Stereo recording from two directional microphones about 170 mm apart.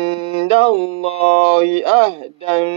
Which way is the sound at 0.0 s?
30° right (ahead or behind).